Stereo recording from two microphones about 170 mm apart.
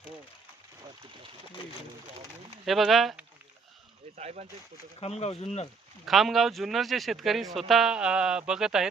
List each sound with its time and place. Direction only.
2.6 s speech: centre (ahead or behind)
4.2 s speech: 40° right (ahead or behind)
4.9 s speech: 40° left (ahead or behind)
6.1 s speech: centre (ahead or behind)